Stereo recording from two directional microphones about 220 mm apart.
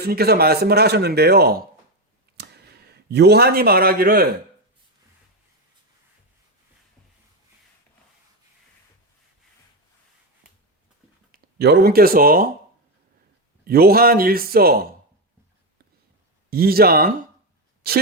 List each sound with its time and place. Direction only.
0.0 s speech: 45° right (ahead or behind)
2.4 s a sound: 45° right (ahead or behind)
3.1 s speech: 50° right (ahead or behind)
11.3 s speech: 45° right (ahead or behind)
13.7 s speech: 45° right (ahead or behind)
16.5 s speech: 45° right (ahead or behind)